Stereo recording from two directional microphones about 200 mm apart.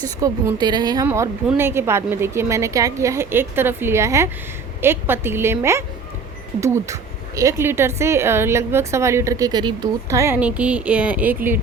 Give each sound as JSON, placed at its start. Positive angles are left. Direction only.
{"t": 0.0, "sound": "speech", "side_deg": -20}